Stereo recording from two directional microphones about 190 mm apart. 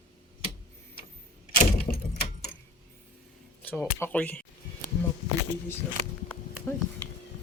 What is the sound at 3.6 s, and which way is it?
Speech, 10° left (ahead or behind).